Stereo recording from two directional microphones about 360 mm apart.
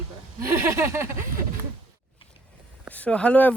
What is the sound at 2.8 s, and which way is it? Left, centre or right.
Speech, centre.